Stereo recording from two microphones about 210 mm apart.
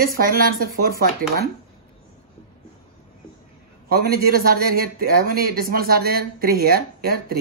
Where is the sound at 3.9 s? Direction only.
45° right (ahead or behind).